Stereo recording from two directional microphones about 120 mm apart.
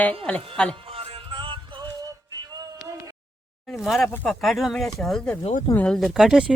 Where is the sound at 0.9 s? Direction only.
55° right (ahead or behind).